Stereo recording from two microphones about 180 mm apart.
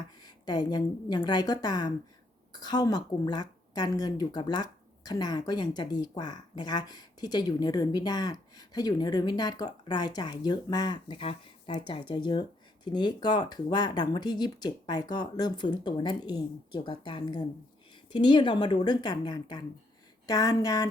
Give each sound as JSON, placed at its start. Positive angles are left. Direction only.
{"t": 0.2, "sound": "a woman's voice", "side_deg": 20}